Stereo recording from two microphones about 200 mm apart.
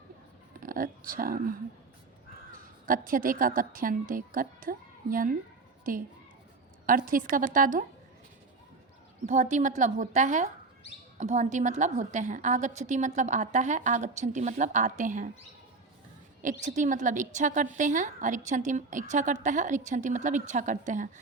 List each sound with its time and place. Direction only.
0.6 s speech: 45° right (ahead or behind)
2.6 s a woman's voice: 45° right (ahead or behind)
6.8 s a woman's voice: 45° right (ahead or behind)
9.2 s a woman's voice: 35° right (ahead or behind)
16.4 s a woman's voice: 40° right (ahead or behind)